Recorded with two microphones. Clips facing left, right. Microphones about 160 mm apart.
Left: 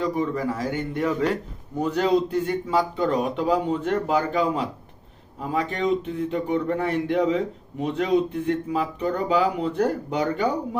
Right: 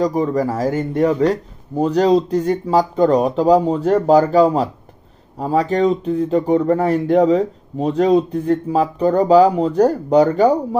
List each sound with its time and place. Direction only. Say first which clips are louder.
0.0 s speech: right 7 dB; 40° right (ahead or behind)